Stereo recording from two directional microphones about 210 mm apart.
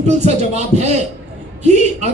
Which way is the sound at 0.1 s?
30° right (ahead or behind).